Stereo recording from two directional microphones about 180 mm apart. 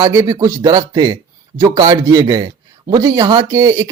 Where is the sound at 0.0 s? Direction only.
20° right (ahead or behind).